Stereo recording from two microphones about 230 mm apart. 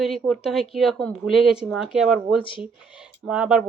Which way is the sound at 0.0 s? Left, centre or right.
Centre.